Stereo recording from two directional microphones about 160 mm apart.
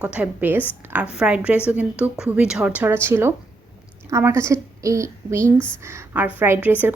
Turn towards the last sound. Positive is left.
turn(degrees=-10)  # may be behind; listen again after turning